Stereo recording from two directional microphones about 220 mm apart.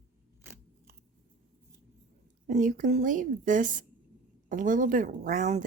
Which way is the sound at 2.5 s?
35° right (ahead or behind).